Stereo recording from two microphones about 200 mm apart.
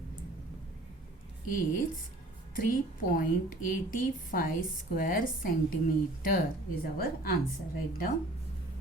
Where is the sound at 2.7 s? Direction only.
45° left (ahead or behind).